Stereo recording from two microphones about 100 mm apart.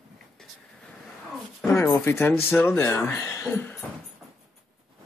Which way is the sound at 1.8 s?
25° left (ahead or behind).